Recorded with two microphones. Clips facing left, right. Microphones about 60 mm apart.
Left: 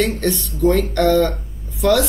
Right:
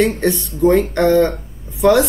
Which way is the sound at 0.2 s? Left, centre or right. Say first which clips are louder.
Right 3 dB; centre.